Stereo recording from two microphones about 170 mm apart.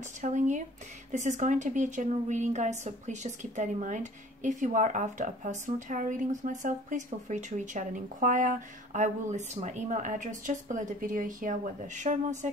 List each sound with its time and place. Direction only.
0.2 s a woman's voice: 45° right (ahead or behind)